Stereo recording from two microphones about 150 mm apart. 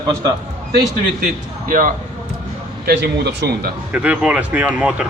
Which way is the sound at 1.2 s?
65° right (ahead or behind).